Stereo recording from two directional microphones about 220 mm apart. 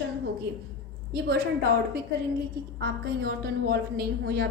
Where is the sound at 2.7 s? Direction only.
45° right (ahead or behind).